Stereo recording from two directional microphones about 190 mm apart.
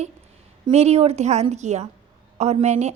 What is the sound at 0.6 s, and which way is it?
A woman's voice, 35° right (ahead or behind).